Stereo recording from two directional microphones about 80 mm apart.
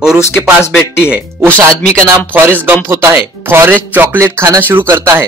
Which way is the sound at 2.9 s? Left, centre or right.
Right.